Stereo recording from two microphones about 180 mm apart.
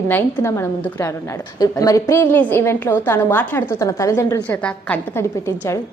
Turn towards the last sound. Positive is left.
turn(degrees=10)  # may be behind; listen again after turning